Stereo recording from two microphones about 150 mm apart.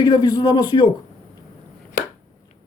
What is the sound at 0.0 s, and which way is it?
Speech, 25° left (ahead or behind).